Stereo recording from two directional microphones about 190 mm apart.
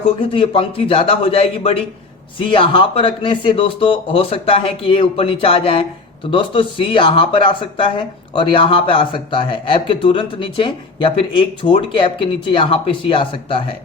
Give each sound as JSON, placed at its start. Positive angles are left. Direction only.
{"t": 0.2, "sound": "speech", "side_deg": 25}